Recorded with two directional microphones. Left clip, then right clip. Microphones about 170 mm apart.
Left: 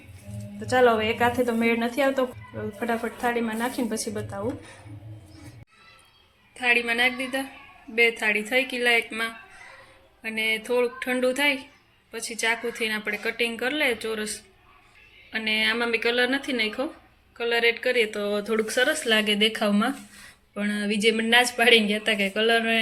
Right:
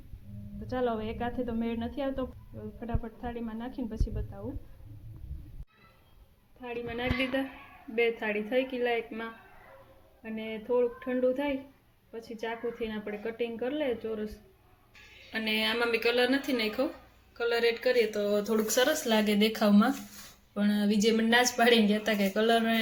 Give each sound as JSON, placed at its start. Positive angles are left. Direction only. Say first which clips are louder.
{"t": 0.7, "sound": "a woman's voice", "louder": "left 12 dB", "side_deg": 10}
{"t": 6.6, "sound": "a woman's voice", "louder": "left 14 dB", "side_deg": 15}
{"t": 15.3, "sound": "a woman's voice", "louder": "left 6 dB", "side_deg": 5}